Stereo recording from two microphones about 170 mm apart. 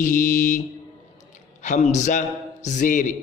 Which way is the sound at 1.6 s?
45° left (ahead or behind).